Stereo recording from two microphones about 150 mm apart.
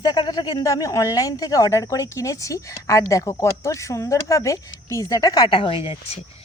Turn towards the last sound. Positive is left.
turn(degrees=35)  # may be behind; listen again after turning